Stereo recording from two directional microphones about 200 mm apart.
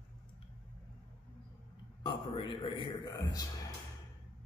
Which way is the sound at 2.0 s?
25° left (ahead or behind).